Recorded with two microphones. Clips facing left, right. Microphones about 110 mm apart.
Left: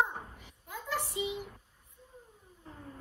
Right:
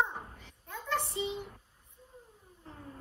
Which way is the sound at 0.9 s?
30° right (ahead or behind).